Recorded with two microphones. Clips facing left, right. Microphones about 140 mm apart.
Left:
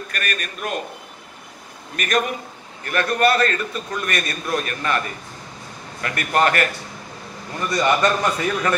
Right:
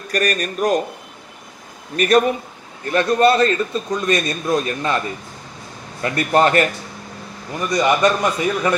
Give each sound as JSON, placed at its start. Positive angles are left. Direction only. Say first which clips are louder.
{"t": 0.1, "sound": "a man's voice", "louder": "right 12 dB", "side_deg": -35}
{"t": 2.0, "sound": "a man's voice", "louder": "right 7 dB", "side_deg": -30}
{"t": 6.0, "sound": "a man's voice", "louder": "right 4 dB", "side_deg": -25}
{"t": 7.5, "sound": "a man's voice", "louder": "right 2 dB", "side_deg": -15}